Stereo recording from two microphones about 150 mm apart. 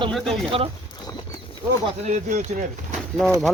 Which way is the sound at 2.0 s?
55° right (ahead or behind).